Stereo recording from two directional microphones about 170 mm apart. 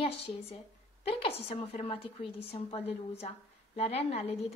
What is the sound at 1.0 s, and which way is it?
A woman's voice, 35° left (ahead or behind).